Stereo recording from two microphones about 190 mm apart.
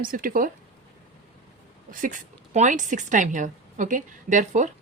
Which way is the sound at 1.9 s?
45° right (ahead or behind).